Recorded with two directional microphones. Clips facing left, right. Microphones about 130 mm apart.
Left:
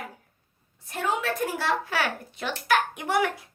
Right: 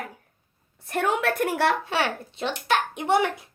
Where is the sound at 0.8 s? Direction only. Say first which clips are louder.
Right 4 dB; 60° right (ahead or behind).